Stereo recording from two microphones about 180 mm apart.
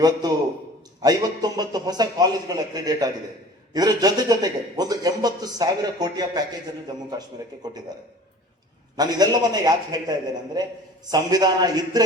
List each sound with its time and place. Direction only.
0.0 s a man's voice: 20° right (ahead or behind)
9.0 s a man's voice: 20° right (ahead or behind)